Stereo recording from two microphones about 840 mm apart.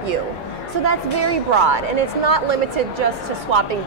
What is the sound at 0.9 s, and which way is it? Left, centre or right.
A woman's voice, right.